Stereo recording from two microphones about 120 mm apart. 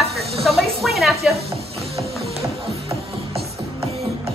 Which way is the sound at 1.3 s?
60° right (ahead or behind).